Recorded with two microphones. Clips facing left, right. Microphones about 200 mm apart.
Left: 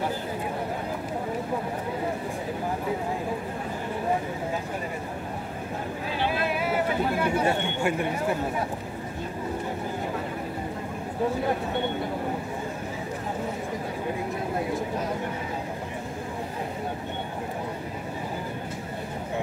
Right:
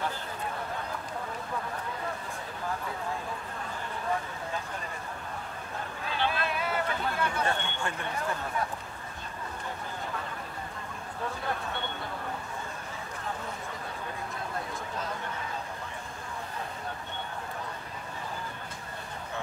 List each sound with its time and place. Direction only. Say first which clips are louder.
6.3 s speech: left 5 dB; 10° left (ahead or behind)
11.4 s speech: left 8 dB; 15° left (ahead or behind)
14.5 s a sound: left 9 dB; 15° left (ahead or behind)